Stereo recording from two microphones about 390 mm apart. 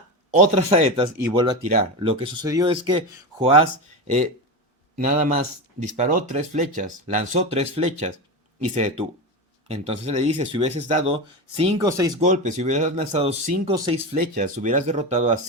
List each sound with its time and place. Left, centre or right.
0.3 s speech: centre
4.0 s a man's voice: centre